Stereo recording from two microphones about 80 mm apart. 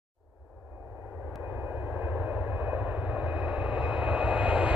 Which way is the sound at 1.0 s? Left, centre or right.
Right.